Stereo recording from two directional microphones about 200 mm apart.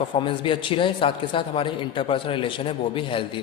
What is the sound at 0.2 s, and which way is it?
A man's voice, 25° left (ahead or behind).